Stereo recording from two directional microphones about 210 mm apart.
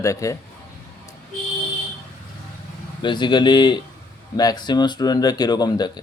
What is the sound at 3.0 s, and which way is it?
Speech, 20° left (ahead or behind).